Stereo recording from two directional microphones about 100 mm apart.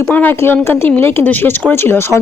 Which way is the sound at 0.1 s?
15° left (ahead or behind).